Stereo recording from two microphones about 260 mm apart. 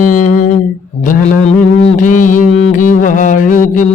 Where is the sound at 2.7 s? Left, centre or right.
Left.